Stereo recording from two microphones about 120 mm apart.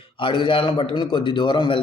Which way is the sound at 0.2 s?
45° left (ahead or behind).